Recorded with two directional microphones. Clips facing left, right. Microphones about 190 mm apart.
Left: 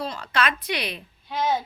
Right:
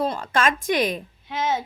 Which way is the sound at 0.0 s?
50° right (ahead or behind).